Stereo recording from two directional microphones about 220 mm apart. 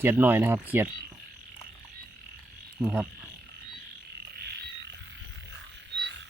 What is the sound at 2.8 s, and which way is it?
Speech, 5° right (ahead or behind).